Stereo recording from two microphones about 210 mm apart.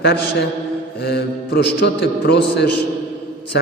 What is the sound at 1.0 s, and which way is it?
A man's voice, 50° left (ahead or behind).